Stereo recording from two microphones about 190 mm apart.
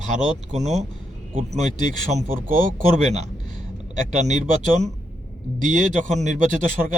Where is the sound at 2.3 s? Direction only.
45° right (ahead or behind).